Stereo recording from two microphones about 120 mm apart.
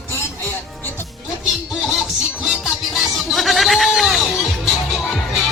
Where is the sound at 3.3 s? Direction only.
Centre (ahead or behind).